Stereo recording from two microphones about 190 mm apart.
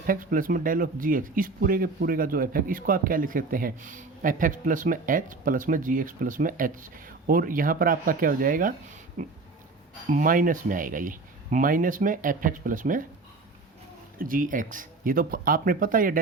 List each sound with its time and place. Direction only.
0.1 s speech: 45° right (ahead or behind)
14.2 s speech: 45° right (ahead or behind)